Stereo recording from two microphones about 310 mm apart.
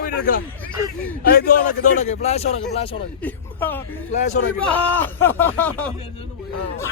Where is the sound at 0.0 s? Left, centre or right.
Left.